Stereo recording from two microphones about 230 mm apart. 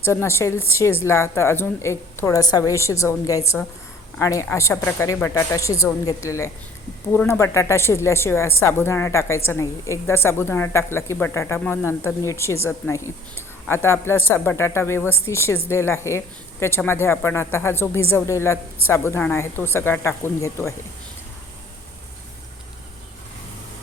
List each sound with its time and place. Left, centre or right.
0.0 s a woman's voice: centre